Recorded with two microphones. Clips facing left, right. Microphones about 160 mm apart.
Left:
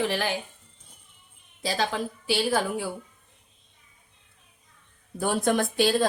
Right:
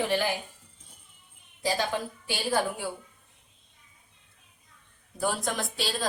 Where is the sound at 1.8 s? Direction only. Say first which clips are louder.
Left 2 dB; 90° left.